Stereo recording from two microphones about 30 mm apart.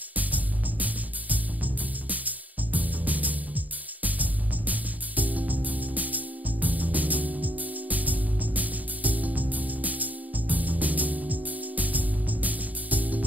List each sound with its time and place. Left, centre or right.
0.1 s music: right